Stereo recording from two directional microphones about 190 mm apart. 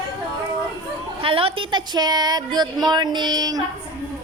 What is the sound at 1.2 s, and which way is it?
A woman's voice, 30° right (ahead or behind).